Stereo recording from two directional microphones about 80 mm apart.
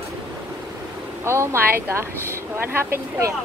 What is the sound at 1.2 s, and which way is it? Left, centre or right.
Speech, right.